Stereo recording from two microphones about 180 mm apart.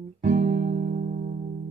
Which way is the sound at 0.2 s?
45° right (ahead or behind).